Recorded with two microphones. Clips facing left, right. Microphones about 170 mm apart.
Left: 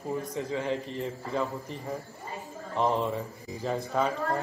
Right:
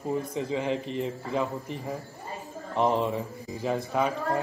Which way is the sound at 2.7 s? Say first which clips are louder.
Right 2 dB; 15° right (ahead or behind).